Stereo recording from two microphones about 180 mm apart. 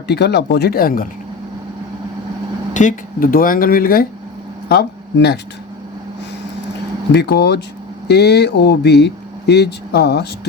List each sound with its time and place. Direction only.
0.1 s speech: 65° left (ahead or behind)
2.7 s speech: 45° left (ahead or behind)
4.7 s a man's voice: 65° left (ahead or behind)
7.1 s speech: 70° left (ahead or behind)